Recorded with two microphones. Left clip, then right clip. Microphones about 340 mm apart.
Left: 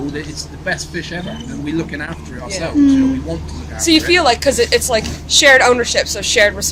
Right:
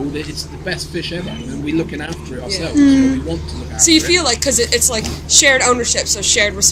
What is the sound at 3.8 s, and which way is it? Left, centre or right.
A woman's voice, left.